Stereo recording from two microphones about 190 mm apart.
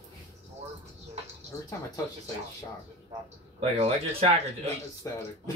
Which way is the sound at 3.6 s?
30° right (ahead or behind).